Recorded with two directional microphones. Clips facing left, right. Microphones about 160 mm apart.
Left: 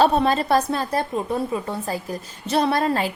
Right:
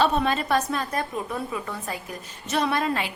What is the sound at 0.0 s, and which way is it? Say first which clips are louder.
A woman's voice: left 4 dB; 35° left (ahead or behind).